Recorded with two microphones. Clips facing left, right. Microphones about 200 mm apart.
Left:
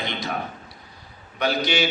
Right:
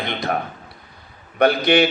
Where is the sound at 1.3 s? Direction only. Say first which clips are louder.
Right 8 dB; 55° right (ahead or behind).